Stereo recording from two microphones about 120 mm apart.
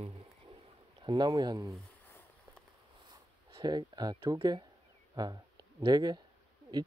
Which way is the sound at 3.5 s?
40° right (ahead or behind).